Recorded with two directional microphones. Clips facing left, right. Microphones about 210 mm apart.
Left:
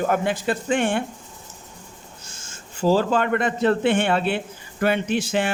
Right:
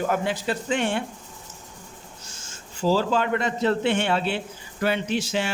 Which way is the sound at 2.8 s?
55° left (ahead or behind).